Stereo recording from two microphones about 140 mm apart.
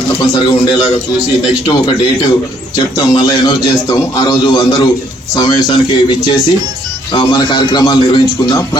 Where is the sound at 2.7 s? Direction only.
30° left (ahead or behind).